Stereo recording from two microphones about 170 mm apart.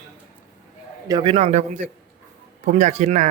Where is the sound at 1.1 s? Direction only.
30° right (ahead or behind).